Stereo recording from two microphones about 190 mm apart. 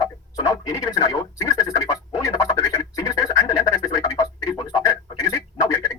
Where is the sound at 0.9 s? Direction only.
20° left (ahead or behind).